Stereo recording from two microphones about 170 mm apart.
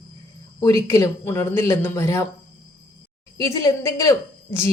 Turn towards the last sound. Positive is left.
turn(degrees=15)  # may be behind; listen again after turning